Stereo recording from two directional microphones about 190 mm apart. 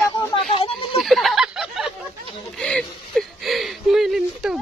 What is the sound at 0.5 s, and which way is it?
Speech, 30° left (ahead or behind).